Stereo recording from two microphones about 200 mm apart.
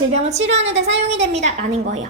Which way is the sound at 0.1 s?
35° right (ahead or behind).